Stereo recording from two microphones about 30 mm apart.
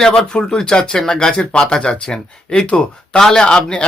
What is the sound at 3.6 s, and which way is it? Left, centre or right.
Speech, left.